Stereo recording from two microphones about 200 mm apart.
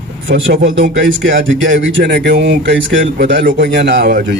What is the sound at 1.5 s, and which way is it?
Speech, 70° right (ahead or behind).